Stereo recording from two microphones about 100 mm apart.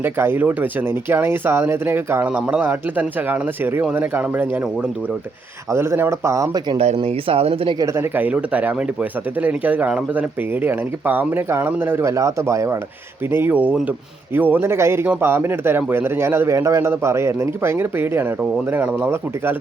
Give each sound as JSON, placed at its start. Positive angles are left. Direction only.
{"t": 0.0, "sound": "speech", "side_deg": -20}
{"t": 2.2, "sound": "speech", "side_deg": -15}
{"t": 5.7, "sound": "speech", "side_deg": -25}
{"t": 6.7, "sound": "speech", "side_deg": -80}
{"t": 7.8, "sound": "speech", "side_deg": -30}
{"t": 13.3, "sound": "speech", "side_deg": -20}